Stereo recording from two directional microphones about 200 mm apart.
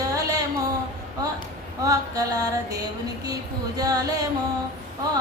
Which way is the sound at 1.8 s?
15° right (ahead or behind).